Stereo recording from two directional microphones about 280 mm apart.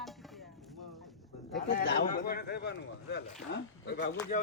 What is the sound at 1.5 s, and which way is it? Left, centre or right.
A man's voice, left.